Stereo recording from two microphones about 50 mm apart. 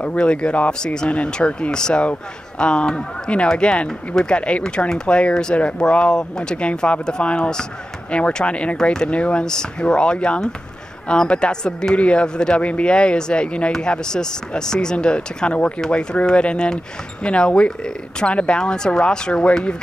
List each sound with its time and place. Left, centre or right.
0.0 s speech: left